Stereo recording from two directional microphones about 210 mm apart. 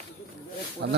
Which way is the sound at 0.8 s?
55° right (ahead or behind).